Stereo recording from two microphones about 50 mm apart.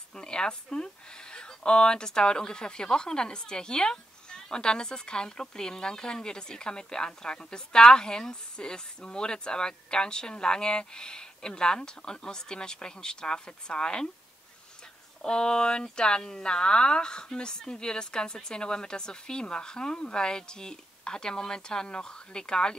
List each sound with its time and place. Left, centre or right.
0.1 s speech: centre
15.2 s speech: centre